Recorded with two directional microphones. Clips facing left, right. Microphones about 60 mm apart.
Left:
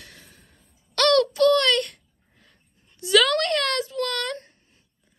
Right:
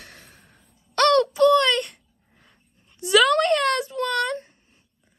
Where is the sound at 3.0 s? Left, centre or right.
Centre.